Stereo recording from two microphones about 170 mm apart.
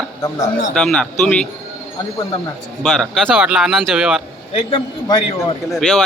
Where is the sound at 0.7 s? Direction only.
5° left (ahead or behind).